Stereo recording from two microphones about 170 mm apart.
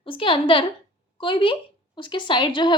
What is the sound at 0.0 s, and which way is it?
A woman's voice, 30° left (ahead or behind).